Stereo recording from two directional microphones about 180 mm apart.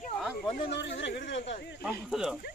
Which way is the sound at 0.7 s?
75° left (ahead or behind).